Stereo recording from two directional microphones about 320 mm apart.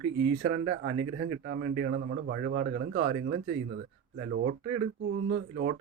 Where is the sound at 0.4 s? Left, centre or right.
Right.